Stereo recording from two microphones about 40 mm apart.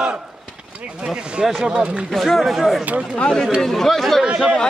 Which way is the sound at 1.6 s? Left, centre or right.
Right.